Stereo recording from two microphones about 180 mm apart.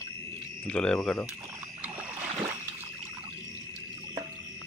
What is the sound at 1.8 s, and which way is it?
Rowboat, 10° right (ahead or behind).